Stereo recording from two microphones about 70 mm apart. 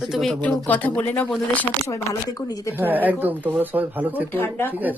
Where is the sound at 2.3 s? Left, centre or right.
Left.